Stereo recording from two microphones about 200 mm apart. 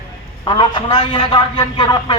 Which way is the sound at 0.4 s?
25° left (ahead or behind).